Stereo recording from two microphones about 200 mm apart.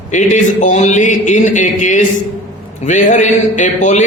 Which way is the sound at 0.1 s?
40° left (ahead or behind).